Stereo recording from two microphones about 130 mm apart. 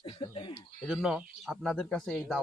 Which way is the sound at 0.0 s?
45° left (ahead or behind).